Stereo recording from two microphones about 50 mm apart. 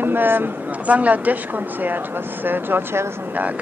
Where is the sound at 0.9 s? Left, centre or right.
Right.